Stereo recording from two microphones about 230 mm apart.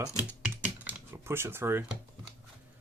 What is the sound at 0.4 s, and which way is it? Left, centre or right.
Typing, centre.